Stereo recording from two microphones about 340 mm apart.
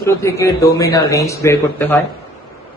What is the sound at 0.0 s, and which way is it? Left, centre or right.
Speech, centre.